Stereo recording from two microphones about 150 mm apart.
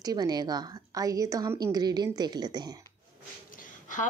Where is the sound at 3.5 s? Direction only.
60° left (ahead or behind).